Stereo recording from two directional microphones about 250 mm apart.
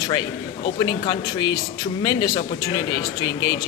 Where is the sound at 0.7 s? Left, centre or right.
Centre.